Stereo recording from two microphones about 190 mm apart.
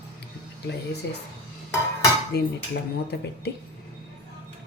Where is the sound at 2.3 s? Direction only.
60° left (ahead or behind).